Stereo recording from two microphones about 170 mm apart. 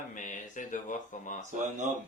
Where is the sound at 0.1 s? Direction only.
50° left (ahead or behind).